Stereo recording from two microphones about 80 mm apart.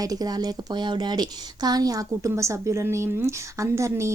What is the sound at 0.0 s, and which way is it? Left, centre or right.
A woman's voice, right.